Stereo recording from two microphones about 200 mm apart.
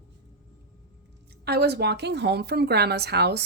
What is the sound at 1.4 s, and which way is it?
A woman's voice, 55° right (ahead or behind).